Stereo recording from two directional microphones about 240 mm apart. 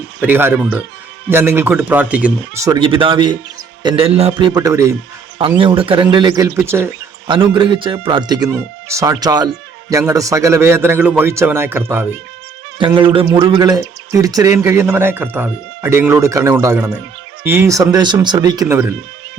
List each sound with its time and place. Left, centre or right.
0.2 s speech: centre
12.8 s speech: centre